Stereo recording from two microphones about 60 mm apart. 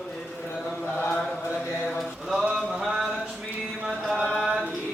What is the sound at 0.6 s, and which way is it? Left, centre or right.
Mantra, left.